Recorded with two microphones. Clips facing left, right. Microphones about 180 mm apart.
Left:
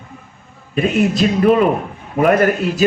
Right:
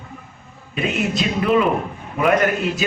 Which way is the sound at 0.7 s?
45° left (ahead or behind).